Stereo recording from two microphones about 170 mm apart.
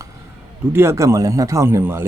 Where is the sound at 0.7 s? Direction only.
15° right (ahead or behind).